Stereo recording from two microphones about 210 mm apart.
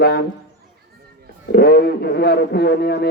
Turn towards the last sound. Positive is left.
turn(degrees=50)  # may be behind; listen again after turning